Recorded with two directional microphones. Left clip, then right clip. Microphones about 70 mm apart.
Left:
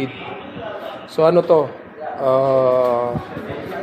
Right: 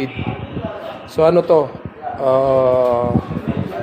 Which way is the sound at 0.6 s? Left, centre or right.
Centre.